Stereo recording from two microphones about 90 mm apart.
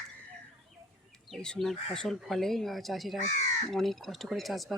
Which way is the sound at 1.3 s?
5° left (ahead or behind).